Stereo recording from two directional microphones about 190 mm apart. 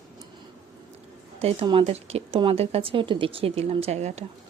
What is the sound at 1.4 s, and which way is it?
Speech, 30° right (ahead or behind).